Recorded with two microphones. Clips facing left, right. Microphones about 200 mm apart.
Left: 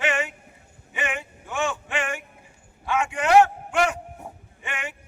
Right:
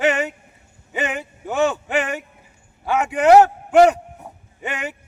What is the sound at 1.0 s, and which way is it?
Speech, 40° right (ahead or behind).